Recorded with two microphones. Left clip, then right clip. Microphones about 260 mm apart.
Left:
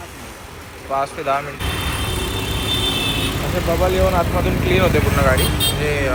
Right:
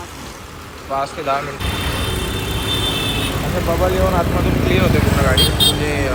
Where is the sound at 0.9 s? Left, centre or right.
Centre.